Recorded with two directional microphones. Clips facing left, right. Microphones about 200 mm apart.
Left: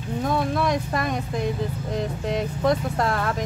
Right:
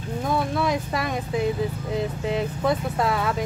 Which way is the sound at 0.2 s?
5° right (ahead or behind).